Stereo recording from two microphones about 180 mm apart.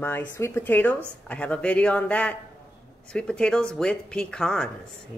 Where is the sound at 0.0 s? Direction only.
10° left (ahead or behind).